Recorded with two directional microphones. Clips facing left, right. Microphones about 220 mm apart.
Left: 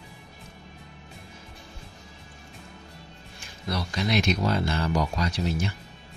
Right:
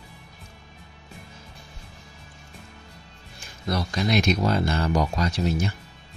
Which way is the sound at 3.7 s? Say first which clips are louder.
Right 3 dB; 45° right (ahead or behind).